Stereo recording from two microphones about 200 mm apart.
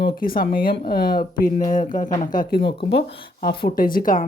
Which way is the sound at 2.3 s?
50° left (ahead or behind).